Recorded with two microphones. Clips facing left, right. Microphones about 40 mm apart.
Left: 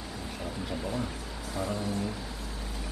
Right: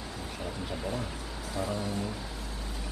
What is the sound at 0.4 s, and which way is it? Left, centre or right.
Speech, centre.